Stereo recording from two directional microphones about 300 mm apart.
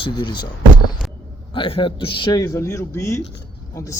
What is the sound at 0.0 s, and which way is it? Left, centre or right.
Speech, centre.